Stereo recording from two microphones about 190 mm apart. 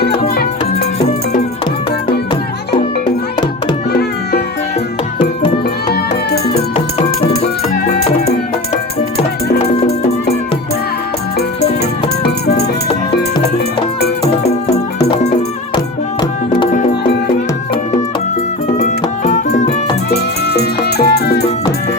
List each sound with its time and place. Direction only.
0.0 s music: 55° left (ahead or behind)
5.9 s music: 55° left (ahead or behind)
6.7 s music: 30° left (ahead or behind)
9.7 s music: 35° left (ahead or behind)
18.8 s music: 40° left (ahead or behind)
20.1 s music: 60° left (ahead or behind)